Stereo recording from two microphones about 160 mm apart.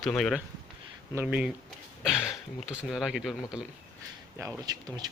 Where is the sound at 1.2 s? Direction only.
10° right (ahead or behind).